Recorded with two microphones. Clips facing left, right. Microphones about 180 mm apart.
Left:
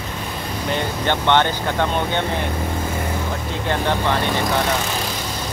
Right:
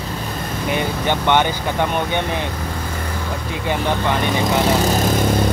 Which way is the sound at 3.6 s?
15° right (ahead or behind).